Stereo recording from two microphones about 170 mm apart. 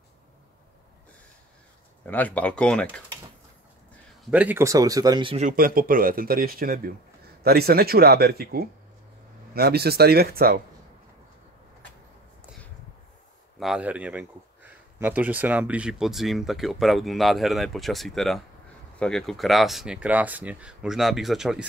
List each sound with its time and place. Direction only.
2.0 s speech: 10° left (ahead or behind)
4.2 s speech: 10° right (ahead or behind); by 5.5 s 30° right (ahead or behind)
5.5 s speech: 55° right (ahead or behind)
13.6 s speech: 5° right (ahead or behind)